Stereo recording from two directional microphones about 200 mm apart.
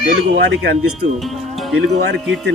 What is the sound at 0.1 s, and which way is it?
Speech, 60° right (ahead or behind).